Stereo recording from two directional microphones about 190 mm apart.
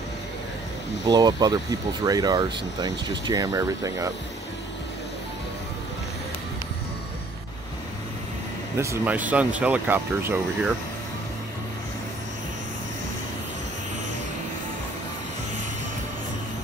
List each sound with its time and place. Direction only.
1.0 s speech: 20° right (ahead or behind)
8.7 s speech: 15° right (ahead or behind)